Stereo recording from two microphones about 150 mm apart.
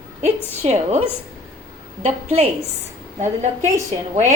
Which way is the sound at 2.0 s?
50° right (ahead or behind).